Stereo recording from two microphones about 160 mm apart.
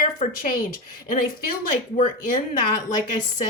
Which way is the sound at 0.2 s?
55° left (ahead or behind).